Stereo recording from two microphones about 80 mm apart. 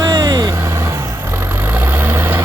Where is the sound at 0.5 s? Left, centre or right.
Right.